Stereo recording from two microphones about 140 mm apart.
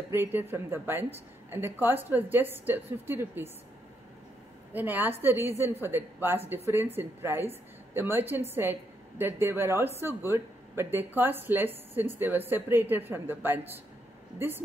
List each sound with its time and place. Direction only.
0.1 s speech: 15° right (ahead or behind)
4.7 s speech: 15° right (ahead or behind)